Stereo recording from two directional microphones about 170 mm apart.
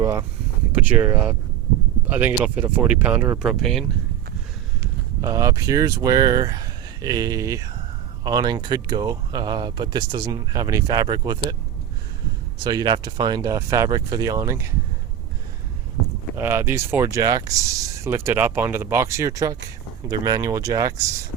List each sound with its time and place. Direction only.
0.0 s speech: 15° right (ahead or behind); by 3.8 s centre (ahead or behind)
5.2 s speech: 20° right (ahead or behind)
12.6 s speech: 25° right (ahead or behind)
16.3 s speech: 15° right (ahead or behind)